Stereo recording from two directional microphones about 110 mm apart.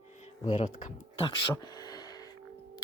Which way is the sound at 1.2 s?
45° left (ahead or behind).